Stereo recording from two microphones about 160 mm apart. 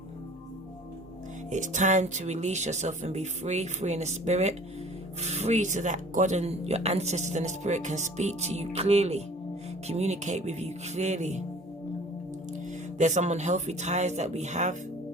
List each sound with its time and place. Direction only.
1.5 s speech: 50° right (ahead or behind)
13.0 s speech: 50° right (ahead or behind)